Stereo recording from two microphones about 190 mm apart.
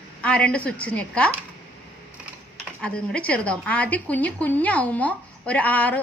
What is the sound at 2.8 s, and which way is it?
A woman's voice, 5° left (ahead or behind).